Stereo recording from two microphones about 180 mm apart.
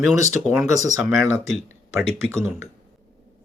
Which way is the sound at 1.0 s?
10° right (ahead or behind).